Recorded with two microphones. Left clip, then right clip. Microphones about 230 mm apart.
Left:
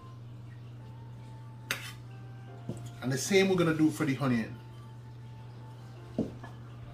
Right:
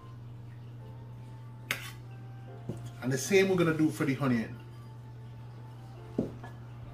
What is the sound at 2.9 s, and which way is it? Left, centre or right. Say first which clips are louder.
Speech: right 1 dB; centre.